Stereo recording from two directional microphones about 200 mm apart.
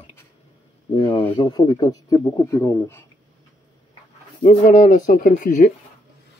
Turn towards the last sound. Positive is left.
turn(degrees=40)  # may be behind; listen again after turning